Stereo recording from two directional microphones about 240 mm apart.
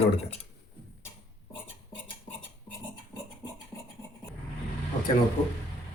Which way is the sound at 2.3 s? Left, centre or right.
Centre.